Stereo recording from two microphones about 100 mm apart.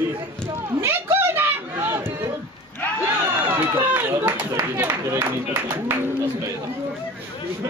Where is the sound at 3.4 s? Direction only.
25° right (ahead or behind).